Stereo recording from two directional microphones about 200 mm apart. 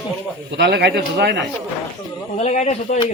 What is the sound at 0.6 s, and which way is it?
Speech, 55° right (ahead or behind).